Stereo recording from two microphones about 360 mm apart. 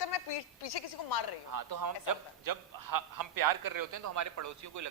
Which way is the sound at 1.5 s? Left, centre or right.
Right.